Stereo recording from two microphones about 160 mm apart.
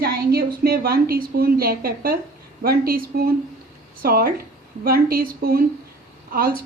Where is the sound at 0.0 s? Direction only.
75° right (ahead or behind).